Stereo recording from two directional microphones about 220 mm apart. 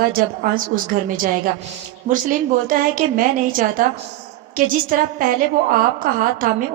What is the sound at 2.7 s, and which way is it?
A woman's voice, 40° right (ahead or behind).